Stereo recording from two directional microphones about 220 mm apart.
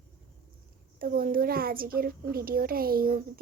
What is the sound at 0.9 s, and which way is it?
A child's voice, 40° right (ahead or behind).